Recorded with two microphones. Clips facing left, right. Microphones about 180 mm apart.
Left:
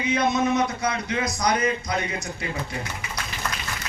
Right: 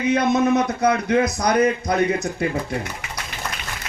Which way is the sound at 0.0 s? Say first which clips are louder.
Right 4 dB; 55° right (ahead or behind).